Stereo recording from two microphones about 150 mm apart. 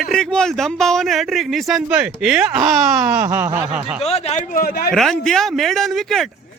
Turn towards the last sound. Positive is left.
turn(degrees=0)  # may be behind; listen again after turning